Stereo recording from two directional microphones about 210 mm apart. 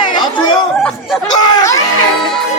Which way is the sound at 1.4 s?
15° left (ahead or behind).